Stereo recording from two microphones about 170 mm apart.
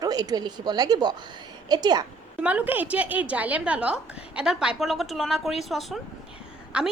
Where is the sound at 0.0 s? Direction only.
20° right (ahead or behind).